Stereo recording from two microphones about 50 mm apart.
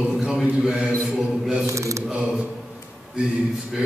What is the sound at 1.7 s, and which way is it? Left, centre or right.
Mantra, right.